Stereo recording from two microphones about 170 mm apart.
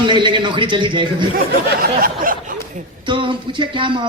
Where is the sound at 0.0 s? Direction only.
30° right (ahead or behind).